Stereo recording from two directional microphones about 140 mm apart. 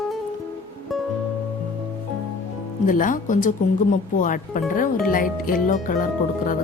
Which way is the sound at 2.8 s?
70° left (ahead or behind).